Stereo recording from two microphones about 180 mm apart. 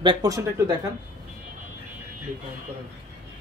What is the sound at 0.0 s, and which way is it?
Speech, 20° right (ahead or behind).